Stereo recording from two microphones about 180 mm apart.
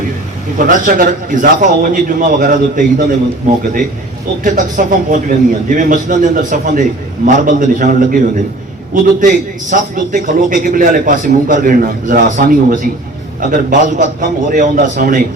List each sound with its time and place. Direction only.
0.6 s a man's voice: 50° right (ahead or behind)
4.4 s a man's voice: 50° right (ahead or behind)
9.2 s a man's voice: 45° right (ahead or behind)